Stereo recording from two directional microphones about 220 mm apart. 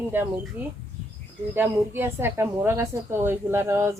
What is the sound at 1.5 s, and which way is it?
A woman's voice, 10° right (ahead or behind).